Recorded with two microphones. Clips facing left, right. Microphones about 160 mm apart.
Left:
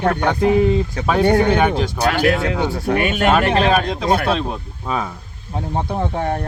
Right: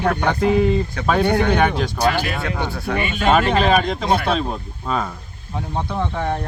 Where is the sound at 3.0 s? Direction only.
55° left (ahead or behind).